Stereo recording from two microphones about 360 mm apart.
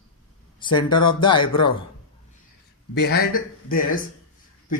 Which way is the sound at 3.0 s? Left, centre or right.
Left.